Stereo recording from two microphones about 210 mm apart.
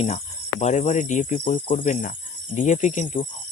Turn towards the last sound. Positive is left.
turn(degrees=35)  # may be behind; listen again after turning